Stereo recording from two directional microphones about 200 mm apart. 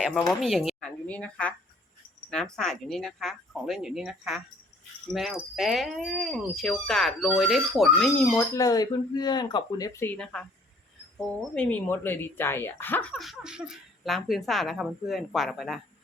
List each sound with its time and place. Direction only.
0.0 s speech: 5° left (ahead or behind)
8.4 s speech: 15° left (ahead or behind); by 15.8 s centre (ahead or behind)